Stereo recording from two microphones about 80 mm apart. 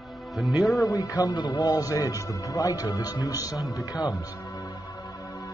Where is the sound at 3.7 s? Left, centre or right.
Left.